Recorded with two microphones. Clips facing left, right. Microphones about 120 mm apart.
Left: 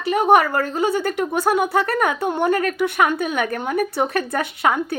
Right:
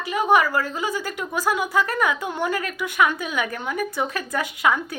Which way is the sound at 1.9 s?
45° left (ahead or behind).